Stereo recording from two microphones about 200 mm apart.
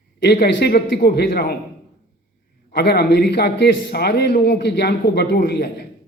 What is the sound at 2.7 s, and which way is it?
A man's voice, 55° left (ahead or behind).